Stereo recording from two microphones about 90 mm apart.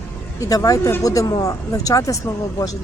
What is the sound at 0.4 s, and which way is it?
Speech, 40° left (ahead or behind).